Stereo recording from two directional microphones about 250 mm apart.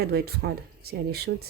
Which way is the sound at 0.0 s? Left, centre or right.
Right.